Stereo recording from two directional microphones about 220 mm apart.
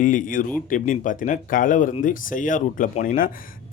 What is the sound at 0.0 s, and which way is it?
Speech, 35° left (ahead or behind).